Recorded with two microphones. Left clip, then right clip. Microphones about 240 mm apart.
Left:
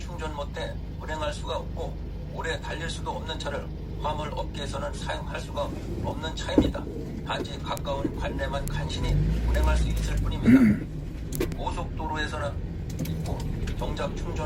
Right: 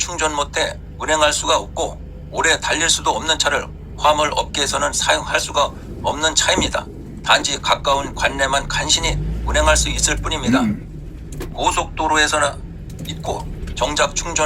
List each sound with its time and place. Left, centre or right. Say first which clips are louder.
0.0 s speech: right 15 dB; right
11.6 s speech: right 15 dB; right